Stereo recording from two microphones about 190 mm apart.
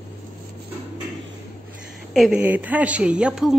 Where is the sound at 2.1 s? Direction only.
5° right (ahead or behind).